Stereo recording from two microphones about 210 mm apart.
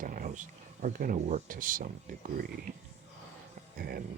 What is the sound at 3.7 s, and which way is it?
Speech, 45° right (ahead or behind).